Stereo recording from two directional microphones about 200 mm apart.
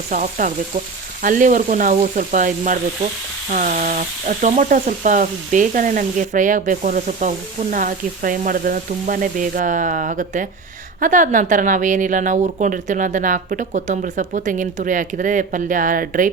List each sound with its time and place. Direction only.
0.1 s speech: 40° right (ahead or behind)